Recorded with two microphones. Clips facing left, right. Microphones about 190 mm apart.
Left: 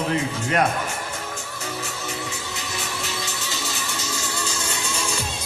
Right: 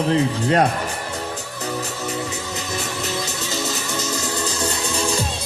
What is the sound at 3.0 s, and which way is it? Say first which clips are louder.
Music: right 5 dB; 40° right (ahead or behind).